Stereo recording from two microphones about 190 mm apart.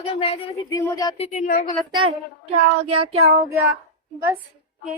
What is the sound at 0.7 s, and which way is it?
Speech, 20° left (ahead or behind).